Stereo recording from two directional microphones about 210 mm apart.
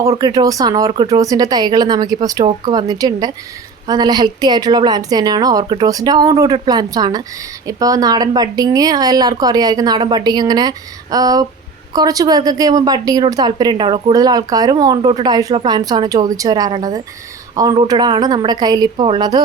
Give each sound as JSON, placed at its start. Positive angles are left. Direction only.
{"t": 0.0, "sound": "a woman's voice", "side_deg": -15}